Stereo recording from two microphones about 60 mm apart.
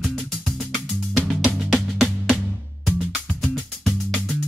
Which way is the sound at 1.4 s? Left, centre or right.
Centre.